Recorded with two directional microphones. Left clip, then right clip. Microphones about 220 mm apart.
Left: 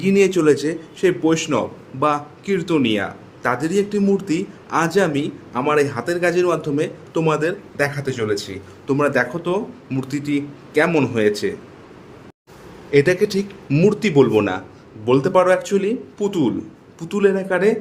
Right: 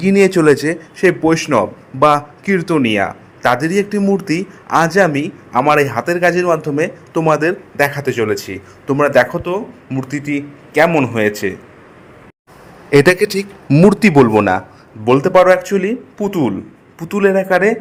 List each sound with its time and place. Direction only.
0.0 s a man's voice: 25° right (ahead or behind)
12.9 s a man's voice: 30° right (ahead or behind)